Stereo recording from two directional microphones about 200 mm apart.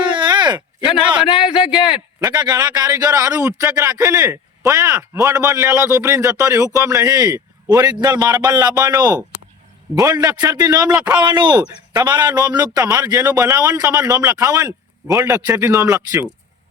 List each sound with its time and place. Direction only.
0.0 s a sound: 25° right (ahead or behind)
2.2 s a man's voice: 20° right (ahead or behind)
10.9 s a man's voice: 5° right (ahead or behind)
11.2 s a man's voice: 20° right (ahead or behind)